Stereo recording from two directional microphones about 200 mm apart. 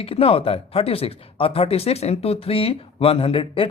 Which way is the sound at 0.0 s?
30° left (ahead or behind).